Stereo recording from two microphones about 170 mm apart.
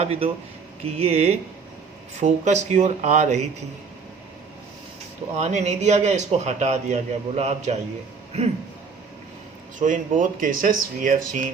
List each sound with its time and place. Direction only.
0.0 s a man's voice: 35° right (ahead or behind)
5.4 s a man's voice: 45° right (ahead or behind)
9.7 s a man's voice: 50° right (ahead or behind)